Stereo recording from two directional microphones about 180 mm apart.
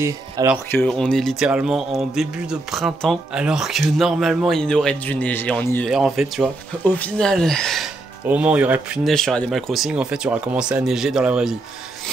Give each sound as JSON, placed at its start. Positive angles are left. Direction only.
{"t": 0.0, "sound": "speech", "side_deg": -15}
{"t": 0.7, "sound": "speech", "side_deg": 10}
{"t": 5.9, "sound": "speech", "side_deg": 0}